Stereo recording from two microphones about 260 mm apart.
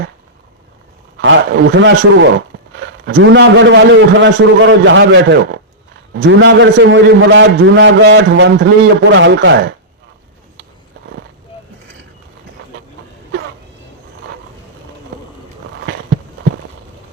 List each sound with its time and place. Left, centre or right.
1.2 s a man's voice: right